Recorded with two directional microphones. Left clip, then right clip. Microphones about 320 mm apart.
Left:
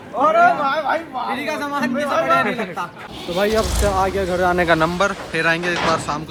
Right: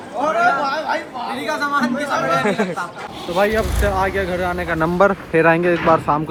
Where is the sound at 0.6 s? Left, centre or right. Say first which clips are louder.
Left 1 dB; centre.